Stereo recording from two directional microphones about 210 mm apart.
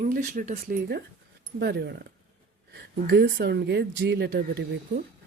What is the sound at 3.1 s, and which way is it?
Speech, 50° right (ahead or behind).